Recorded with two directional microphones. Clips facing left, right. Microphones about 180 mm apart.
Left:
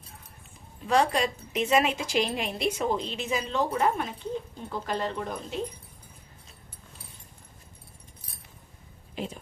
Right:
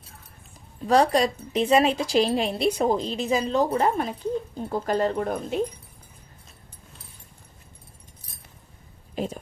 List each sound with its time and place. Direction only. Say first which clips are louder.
0.9 s a woman's voice: right 5 dB; 35° right (ahead or behind); by 5.5 s 55° right (ahead or behind)
9.1 s speech: right 6 dB; 45° right (ahead or behind)